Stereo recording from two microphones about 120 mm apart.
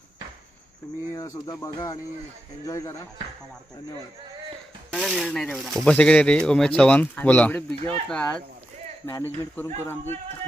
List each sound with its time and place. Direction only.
1.1 s speech: 25° left (ahead or behind)
5.0 s speech: centre (ahead or behind)
9.0 s speech: 20° left (ahead or behind)